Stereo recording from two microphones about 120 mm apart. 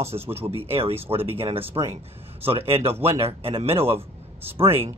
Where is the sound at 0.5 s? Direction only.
55° right (ahead or behind).